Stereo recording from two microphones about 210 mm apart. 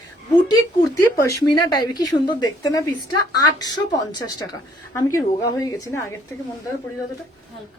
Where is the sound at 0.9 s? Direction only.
15° left (ahead or behind).